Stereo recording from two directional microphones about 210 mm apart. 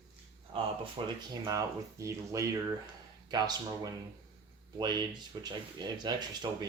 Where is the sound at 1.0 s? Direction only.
25° right (ahead or behind).